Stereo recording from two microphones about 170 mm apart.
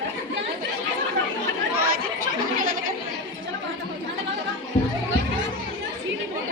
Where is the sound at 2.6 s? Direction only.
55° right (ahead or behind).